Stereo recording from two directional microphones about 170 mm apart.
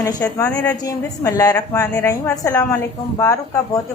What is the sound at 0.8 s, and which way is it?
A woman's voice, 20° left (ahead or behind).